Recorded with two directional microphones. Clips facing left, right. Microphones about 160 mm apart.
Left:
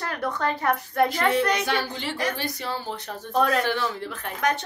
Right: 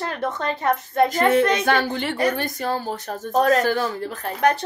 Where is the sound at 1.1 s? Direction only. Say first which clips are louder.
Right 5 dB; 45° right (ahead or behind).